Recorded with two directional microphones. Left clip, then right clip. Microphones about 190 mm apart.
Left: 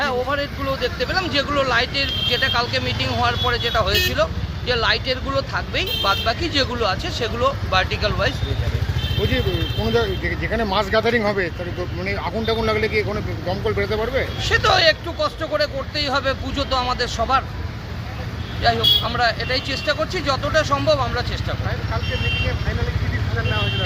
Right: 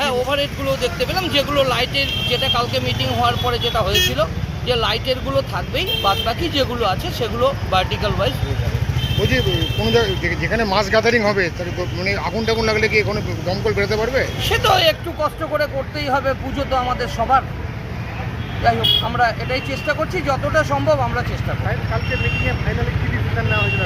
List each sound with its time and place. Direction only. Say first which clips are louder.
0.0 s speech: right 2 dB; 5° left (ahead or behind)
9.8 s speech: right 3 dB; 5° left (ahead or behind)
15.2 s speech: right 1 dB; 30° left (ahead or behind)
18.6 s speech: right 1 dB; 35° left (ahead or behind)